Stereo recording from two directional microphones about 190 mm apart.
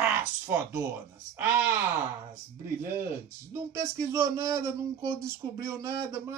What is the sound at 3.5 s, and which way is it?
Speech, 15° right (ahead or behind).